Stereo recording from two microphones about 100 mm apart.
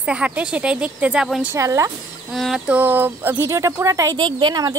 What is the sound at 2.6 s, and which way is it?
Speech, 15° right (ahead or behind).